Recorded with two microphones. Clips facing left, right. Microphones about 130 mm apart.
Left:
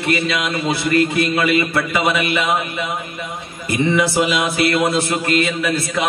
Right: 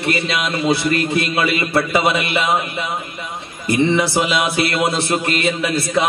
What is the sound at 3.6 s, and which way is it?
A man's voice, 30° right (ahead or behind).